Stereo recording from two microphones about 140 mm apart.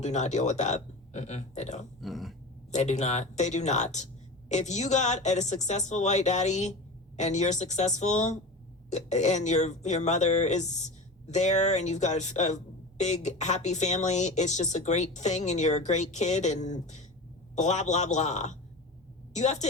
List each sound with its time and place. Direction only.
0.0 s speech: 55° left (ahead or behind)
2.0 s a sound: centre (ahead or behind)
2.7 s a woman's voice: 55° left (ahead or behind)